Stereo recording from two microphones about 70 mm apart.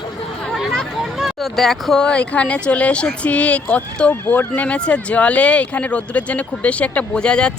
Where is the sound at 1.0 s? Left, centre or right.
Centre.